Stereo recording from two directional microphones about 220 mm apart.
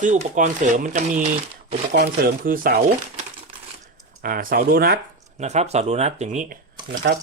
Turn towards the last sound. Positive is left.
turn(degrees=-50)  # may be behind; listen again after turning